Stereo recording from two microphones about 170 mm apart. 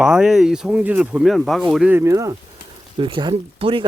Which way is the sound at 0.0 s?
5° right (ahead or behind).